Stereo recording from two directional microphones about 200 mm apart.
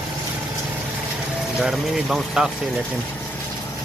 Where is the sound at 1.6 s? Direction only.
Centre (ahead or behind).